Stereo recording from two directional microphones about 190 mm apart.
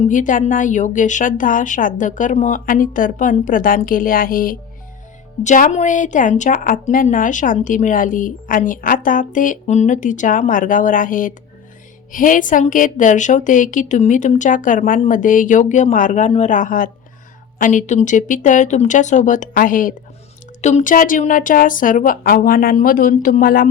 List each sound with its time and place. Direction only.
0.0 s a woman's voice: 40° left (ahead or behind)